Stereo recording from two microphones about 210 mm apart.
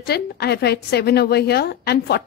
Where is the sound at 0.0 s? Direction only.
50° left (ahead or behind).